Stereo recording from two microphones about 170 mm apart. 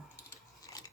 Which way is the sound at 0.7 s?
20° left (ahead or behind).